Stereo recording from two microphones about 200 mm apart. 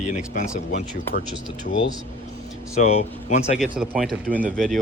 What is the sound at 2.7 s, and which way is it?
Speech, 35° left (ahead or behind).